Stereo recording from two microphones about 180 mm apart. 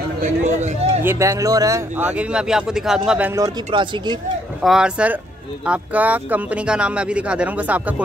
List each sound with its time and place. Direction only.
0.2 s speech: 40° right (ahead or behind)
1.0 s speech: 15° right (ahead or behind)
3.3 s speech: 20° right (ahead or behind)
4.6 s speech: 5° right (ahead or behind)